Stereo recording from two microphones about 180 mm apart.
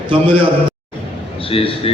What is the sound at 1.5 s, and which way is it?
Speech, 30° left (ahead or behind).